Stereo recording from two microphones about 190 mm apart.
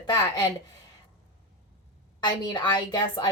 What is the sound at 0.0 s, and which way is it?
Speech, 20° left (ahead or behind).